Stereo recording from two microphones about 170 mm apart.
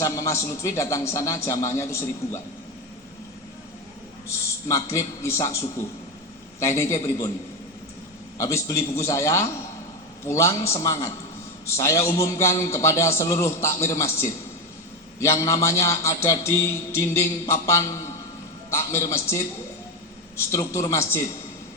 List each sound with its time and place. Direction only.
0.0 s music: 20° left (ahead or behind)
4.7 s music: 15° left (ahead or behind)
8.4 s music: 15° left (ahead or behind)
20.5 s music: 15° left (ahead or behind)